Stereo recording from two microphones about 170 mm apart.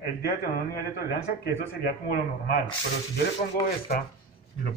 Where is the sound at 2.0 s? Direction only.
60° left (ahead or behind).